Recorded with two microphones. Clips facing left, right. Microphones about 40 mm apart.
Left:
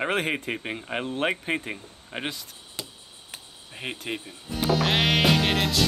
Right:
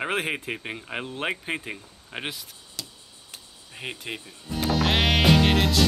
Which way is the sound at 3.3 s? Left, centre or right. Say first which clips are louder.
Left 2 dB; centre.